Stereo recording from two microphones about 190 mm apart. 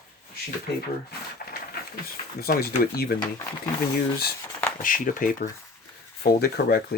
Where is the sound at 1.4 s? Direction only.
50° left (ahead or behind).